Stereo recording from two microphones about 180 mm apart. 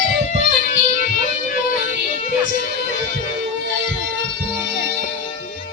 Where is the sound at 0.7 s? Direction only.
50° left (ahead or behind).